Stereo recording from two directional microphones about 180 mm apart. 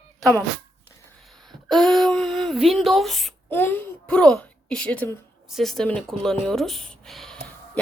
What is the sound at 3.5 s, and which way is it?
A woman's voice, 10° left (ahead or behind).